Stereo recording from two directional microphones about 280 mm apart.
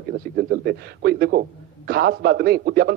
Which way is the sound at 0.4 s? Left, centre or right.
Right.